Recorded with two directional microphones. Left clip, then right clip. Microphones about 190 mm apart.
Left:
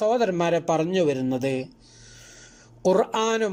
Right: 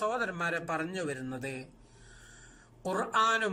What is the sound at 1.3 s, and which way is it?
Speech, 45° left (ahead or behind).